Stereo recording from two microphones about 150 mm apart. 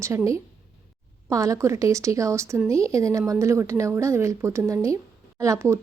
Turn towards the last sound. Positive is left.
turn(degrees=-20)  # may be behind; listen again after turning